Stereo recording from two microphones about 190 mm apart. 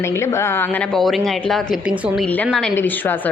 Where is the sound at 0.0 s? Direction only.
15° left (ahead or behind).